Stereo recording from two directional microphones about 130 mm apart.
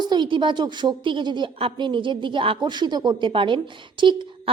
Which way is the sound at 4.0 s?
40° right (ahead or behind).